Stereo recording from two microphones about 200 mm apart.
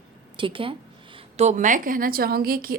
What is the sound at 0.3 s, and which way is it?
Speech, 25° right (ahead or behind).